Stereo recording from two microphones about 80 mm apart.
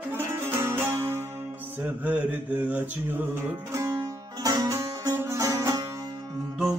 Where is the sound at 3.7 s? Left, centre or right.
Right.